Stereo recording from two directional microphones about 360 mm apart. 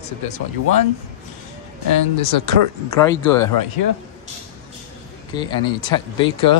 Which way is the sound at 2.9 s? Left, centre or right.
Centre.